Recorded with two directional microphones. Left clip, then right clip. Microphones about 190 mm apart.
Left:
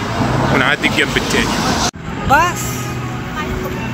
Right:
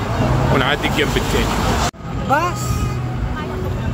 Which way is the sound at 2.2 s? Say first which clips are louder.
Left 5 dB; 50° right (ahead or behind).